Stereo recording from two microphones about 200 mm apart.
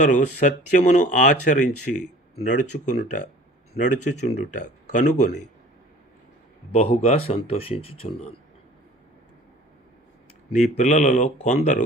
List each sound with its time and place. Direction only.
0.0 s speech: 40° left (ahead or behind)
6.7 s speech: 30° left (ahead or behind)
10.5 s speech: 35° left (ahead or behind)